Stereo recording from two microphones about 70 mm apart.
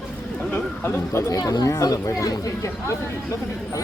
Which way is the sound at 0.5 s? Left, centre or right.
Left.